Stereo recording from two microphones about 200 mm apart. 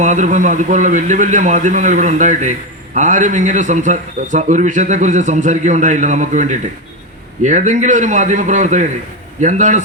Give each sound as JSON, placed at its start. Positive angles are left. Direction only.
{"t": 0.0, "sound": "a man's voice", "side_deg": -40}